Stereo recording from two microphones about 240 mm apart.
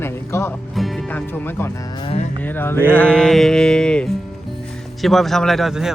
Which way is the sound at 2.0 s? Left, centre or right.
Left.